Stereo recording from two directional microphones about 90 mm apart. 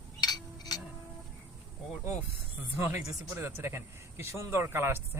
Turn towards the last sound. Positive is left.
turn(degrees=-30)  # may be behind; listen again after turning